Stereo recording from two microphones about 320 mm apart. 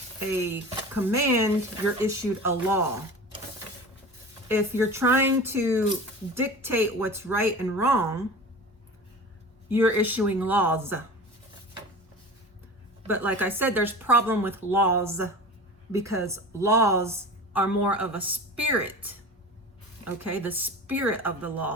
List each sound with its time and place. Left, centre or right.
0.3 s a woman's voice: centre
4.4 s a woman's voice: centre
9.6 s a woman's voice: centre
13.1 s a woman's voice: centre